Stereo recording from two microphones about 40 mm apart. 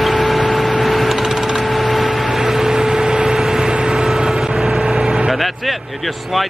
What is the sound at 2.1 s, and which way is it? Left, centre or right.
Vehicle, centre.